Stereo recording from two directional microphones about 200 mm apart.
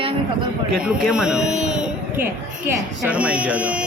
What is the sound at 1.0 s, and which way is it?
A woman's voice, 5° right (ahead or behind).